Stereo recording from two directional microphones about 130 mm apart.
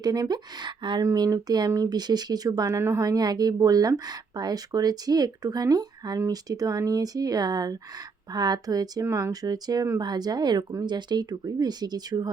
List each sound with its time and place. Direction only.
0.0 s speech: 30° right (ahead or behind)